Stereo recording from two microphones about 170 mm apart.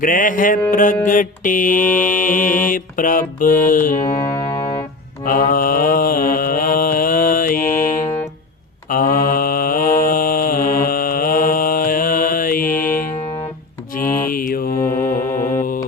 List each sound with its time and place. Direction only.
0.0 s mantra: 55° left (ahead or behind)
4.0 s music: 30° left (ahead or behind)
5.2 s mantra: 55° left (ahead or behind)
14.8 s mantra: 15° left (ahead or behind)